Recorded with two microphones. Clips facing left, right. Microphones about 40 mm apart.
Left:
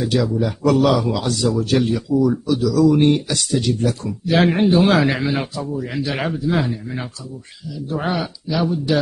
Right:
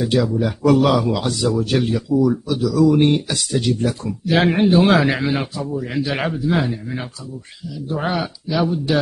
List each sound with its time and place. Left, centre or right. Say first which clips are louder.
0.1 s speech: even; centre
2.1 s speech: even; centre
2.8 s speech: right 1 dB; centre